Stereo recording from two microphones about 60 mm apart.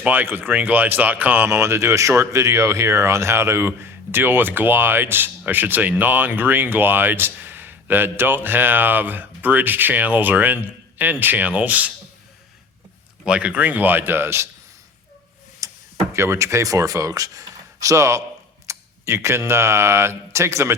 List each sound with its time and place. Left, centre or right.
0.0 s speech: right
1.5 s speech: right
13.2 s speech: centre; by 14.4 s right
15.6 s tick-tock: right
16.1 s speech: right
18.7 s camera: right
19.5 s speech: right